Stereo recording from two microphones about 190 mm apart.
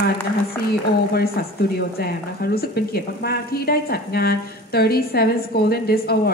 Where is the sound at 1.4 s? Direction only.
60° left (ahead or behind).